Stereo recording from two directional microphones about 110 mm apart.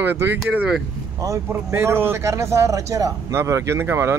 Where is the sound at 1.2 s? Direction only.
25° right (ahead or behind).